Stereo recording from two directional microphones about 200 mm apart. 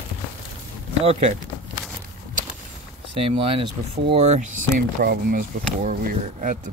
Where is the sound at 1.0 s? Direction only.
35° right (ahead or behind).